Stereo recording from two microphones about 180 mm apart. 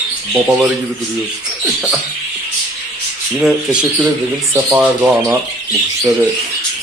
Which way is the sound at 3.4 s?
5° right (ahead or behind).